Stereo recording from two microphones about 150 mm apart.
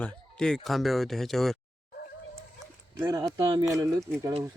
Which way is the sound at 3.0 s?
20° right (ahead or behind).